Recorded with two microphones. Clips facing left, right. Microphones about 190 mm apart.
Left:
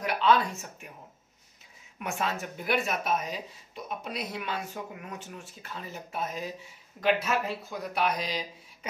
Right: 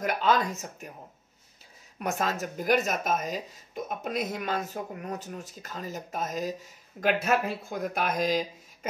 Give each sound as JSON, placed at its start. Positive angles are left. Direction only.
{"t": 0.0, "sound": "speech", "side_deg": -45}
{"t": 2.0, "sound": "speech", "side_deg": -40}